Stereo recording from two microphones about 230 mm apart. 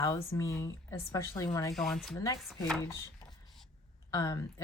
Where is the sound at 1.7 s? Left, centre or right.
Centre.